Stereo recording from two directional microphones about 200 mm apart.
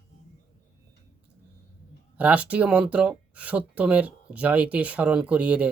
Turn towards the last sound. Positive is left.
turn(degrees=-5)  # may be behind; listen again after turning